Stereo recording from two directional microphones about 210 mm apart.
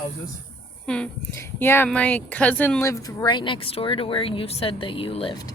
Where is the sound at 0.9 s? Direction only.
5° left (ahead or behind).